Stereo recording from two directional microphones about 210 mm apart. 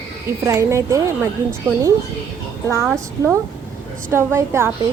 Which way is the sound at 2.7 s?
15° right (ahead or behind).